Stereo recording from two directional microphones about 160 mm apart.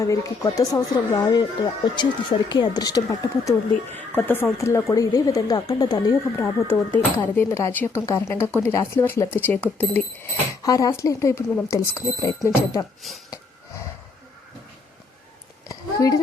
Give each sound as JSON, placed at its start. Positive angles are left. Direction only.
{"t": 0.0, "sound": "a woman's voice", "side_deg": 20}
{"t": 10.6, "sound": "speech", "side_deg": 20}
{"t": 13.0, "sound": "speech", "side_deg": 0}
{"t": 15.7, "sound": "a sound", "side_deg": 20}